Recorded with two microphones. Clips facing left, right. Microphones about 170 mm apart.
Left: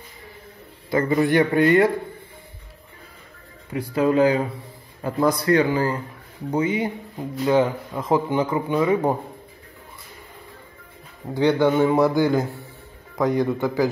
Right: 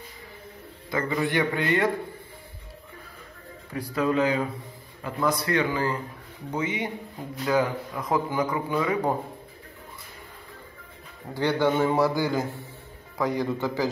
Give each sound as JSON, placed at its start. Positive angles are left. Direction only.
{"t": 0.8, "sound": "a man's voice", "side_deg": 35}
{"t": 3.7, "sound": "speech", "side_deg": 30}
{"t": 11.3, "sound": "a man's voice", "side_deg": 15}